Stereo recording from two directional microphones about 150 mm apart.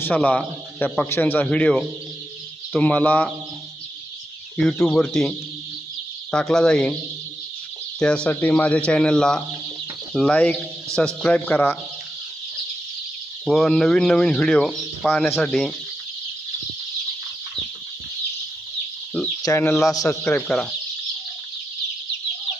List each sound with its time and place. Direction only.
0.0 s a man's voice: 10° left (ahead or behind)
4.9 s speech: 5° left (ahead or behind)
6.3 s speech: 5° left (ahead or behind)
7.9 s a man's voice: 5° left (ahead or behind)
13.4 s speech: 5° left (ahead or behind)
19.4 s a man's voice: 20° left (ahead or behind)
20.2 s speech: 5° left (ahead or behind)